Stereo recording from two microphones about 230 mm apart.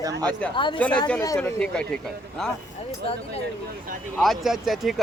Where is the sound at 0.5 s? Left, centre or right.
Left; by 2.5 s centre.